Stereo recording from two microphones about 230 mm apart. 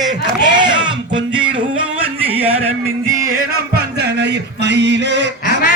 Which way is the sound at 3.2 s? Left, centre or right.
Right.